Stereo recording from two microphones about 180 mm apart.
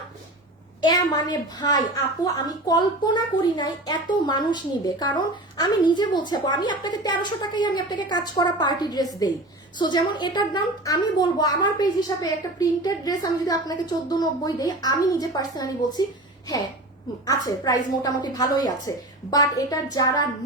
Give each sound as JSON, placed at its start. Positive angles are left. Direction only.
{"t": 0.8, "sound": "speech", "side_deg": 25}
{"t": 17.2, "sound": "speech", "side_deg": 20}